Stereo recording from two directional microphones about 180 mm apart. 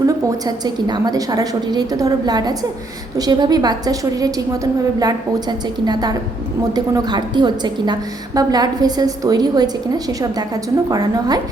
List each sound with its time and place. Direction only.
0.3 s a woman's voice: 20° right (ahead or behind)